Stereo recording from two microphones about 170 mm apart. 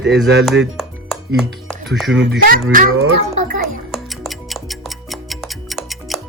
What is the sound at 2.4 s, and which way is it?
Speech, 55° right (ahead or behind).